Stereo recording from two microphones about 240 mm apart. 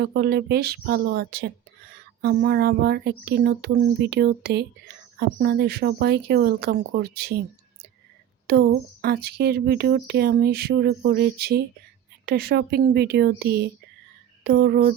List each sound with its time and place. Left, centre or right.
0.0 s speech: right
8.4 s speech: right